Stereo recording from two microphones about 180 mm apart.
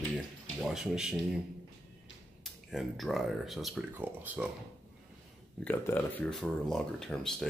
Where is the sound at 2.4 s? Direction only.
Centre (ahead or behind).